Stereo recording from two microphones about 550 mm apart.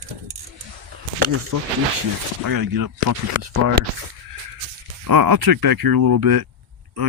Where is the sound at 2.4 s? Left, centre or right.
Right.